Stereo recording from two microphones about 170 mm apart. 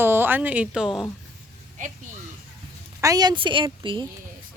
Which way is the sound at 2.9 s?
20° right (ahead or behind).